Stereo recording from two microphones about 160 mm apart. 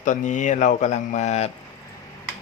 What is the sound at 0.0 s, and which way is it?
Speech, 50° left (ahead or behind).